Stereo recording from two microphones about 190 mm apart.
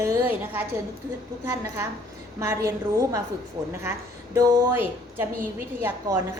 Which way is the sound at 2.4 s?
15° right (ahead or behind).